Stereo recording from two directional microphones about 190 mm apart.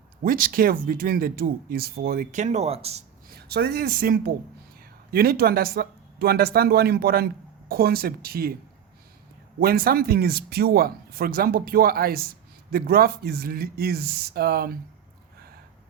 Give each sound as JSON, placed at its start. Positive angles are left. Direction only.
{"t": 0.3, "sound": "speech", "side_deg": -50}
{"t": 3.2, "sound": "speech", "side_deg": -55}
{"t": 9.6, "sound": "speech", "side_deg": -50}